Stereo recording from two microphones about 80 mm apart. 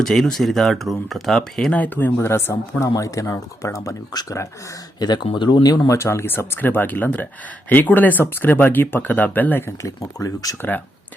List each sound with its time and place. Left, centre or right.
0.0 s speech: centre
1.7 s speech: left
2.8 s speech: left
4.9 s speech: left
5.9 s speech: left
9.6 s speech: left
10.6 s speech: left